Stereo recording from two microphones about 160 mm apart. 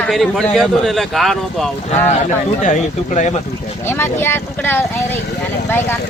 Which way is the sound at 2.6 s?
50° left (ahead or behind).